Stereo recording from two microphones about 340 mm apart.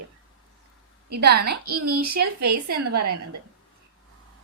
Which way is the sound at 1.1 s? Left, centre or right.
Right.